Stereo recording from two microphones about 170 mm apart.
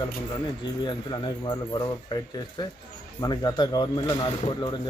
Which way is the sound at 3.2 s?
25° left (ahead or behind).